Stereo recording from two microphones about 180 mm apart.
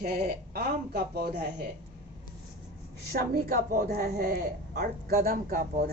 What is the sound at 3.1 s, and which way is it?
A woman's voice, 55° right (ahead or behind).